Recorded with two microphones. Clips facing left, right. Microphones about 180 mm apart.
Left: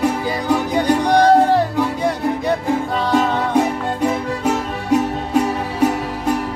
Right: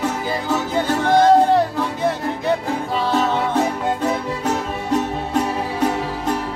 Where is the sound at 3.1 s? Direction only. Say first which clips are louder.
Left 3 dB; 15° left (ahead or behind).